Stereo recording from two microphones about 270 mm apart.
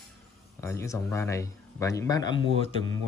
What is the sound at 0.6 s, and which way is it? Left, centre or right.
Speech, centre.